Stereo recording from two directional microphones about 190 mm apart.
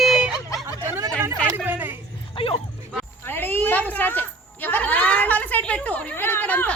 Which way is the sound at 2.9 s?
10° left (ahead or behind).